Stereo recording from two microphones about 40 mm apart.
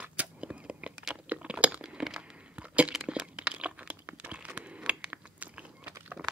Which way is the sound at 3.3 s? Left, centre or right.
Right.